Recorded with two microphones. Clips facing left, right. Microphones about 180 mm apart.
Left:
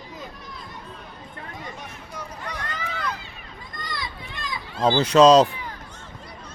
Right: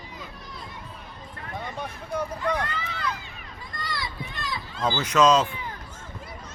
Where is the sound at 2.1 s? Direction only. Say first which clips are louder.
Right 10 dB; 55° right (ahead or behind).